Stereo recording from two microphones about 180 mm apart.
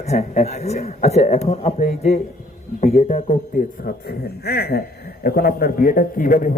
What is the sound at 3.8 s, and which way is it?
A man's voice, 60° left (ahead or behind).